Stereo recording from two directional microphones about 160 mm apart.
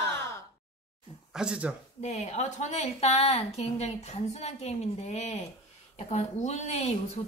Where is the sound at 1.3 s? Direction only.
5° right (ahead or behind).